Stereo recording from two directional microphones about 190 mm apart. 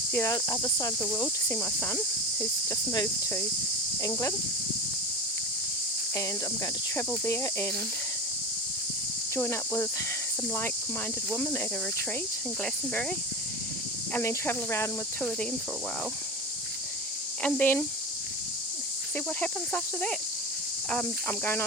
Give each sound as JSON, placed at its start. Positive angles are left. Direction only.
{"t": 0.1, "sound": "cricket", "side_deg": 15}
{"t": 7.3, "sound": "cricket", "side_deg": 15}
{"t": 9.3, "sound": "cricket", "side_deg": 15}
{"t": 11.3, "sound": "cricket", "side_deg": 15}
{"t": 12.6, "sound": "cricket", "side_deg": 5}
{"t": 17.4, "sound": "cricket", "side_deg": 10}
{"t": 19.1, "sound": "cricket", "side_deg": 10}